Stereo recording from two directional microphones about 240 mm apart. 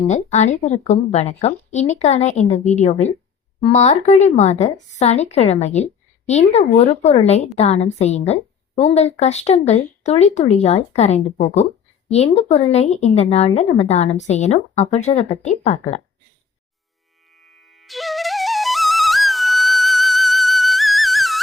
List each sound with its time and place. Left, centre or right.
0.1 s speech: left
17.3 s flute: centre